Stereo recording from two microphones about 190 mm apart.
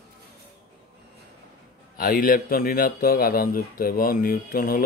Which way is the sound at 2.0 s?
50° left (ahead or behind).